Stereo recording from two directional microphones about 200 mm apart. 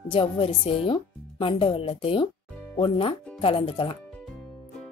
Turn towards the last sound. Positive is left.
turn(degrees=25)  # may be behind; listen again after turning